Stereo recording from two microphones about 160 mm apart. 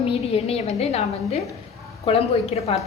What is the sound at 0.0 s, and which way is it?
A woman's voice, 40° left (ahead or behind).